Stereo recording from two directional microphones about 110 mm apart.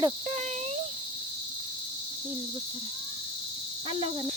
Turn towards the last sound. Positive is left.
turn(degrees=-55)  # may be behind; listen again after turning